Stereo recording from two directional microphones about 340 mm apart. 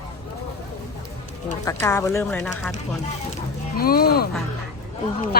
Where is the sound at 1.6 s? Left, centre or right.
Centre.